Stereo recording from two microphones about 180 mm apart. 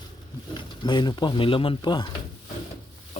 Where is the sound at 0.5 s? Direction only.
25° left (ahead or behind).